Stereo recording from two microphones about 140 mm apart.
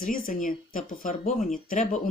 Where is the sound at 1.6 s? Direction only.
65° left (ahead or behind).